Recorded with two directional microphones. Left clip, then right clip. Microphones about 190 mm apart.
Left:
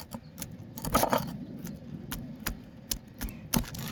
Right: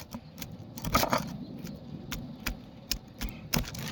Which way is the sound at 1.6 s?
25° left (ahead or behind).